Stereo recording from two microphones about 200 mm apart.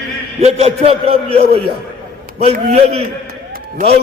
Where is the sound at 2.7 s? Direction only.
30° right (ahead or behind).